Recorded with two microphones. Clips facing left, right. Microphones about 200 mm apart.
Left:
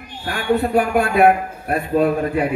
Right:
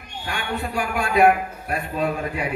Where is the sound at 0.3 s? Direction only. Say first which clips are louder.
Left 10 dB; 55° left (ahead or behind).